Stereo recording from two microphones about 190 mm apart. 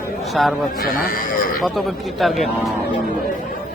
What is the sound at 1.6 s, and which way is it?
A man's voice, centre (ahead or behind).